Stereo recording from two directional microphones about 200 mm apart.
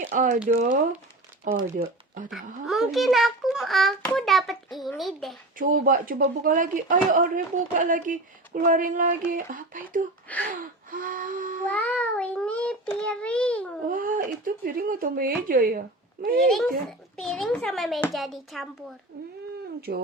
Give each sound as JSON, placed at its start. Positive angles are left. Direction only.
{"t": 0.1, "sound": "speech", "side_deg": -40}
{"t": 1.6, "sound": "speech", "side_deg": -40}
{"t": 2.3, "sound": "a child's voice", "side_deg": 0}
{"t": 5.5, "sound": "speech", "side_deg": -45}
{"t": 10.5, "sound": "gasp", "side_deg": -45}
{"t": 11.7, "sound": "a child's voice", "side_deg": 5}
{"t": 13.8, "sound": "speech", "side_deg": -45}
{"t": 16.5, "sound": "a child's voice", "side_deg": 0}
{"t": 19.9, "sound": "speech", "side_deg": -50}